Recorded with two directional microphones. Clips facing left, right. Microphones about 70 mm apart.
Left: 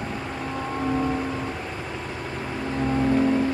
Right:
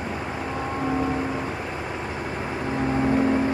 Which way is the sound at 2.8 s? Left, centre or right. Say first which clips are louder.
Left 1 dB; centre.